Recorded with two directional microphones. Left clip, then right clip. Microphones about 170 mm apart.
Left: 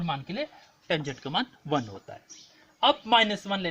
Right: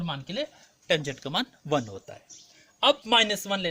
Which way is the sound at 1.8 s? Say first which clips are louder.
Right 1 dB; 50° right (ahead or behind).